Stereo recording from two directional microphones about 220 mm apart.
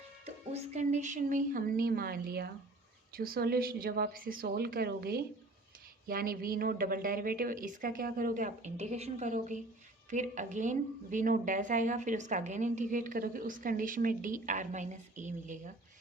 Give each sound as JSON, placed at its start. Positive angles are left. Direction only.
{"t": 0.3, "sound": "a woman's voice", "side_deg": -30}